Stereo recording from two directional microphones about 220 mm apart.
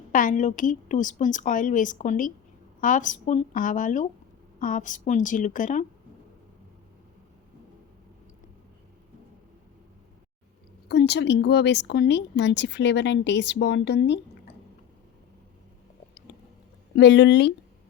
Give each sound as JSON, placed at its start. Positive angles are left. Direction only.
{"t": 0.1, "sound": "a woman's voice", "side_deg": 35}
{"t": 10.8, "sound": "speech", "side_deg": 50}
{"t": 16.9, "sound": "speech", "side_deg": 50}